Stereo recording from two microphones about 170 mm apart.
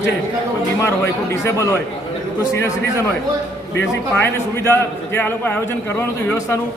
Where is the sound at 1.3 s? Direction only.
15° left (ahead or behind).